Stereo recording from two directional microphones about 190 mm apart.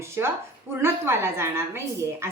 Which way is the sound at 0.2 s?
15° right (ahead or behind).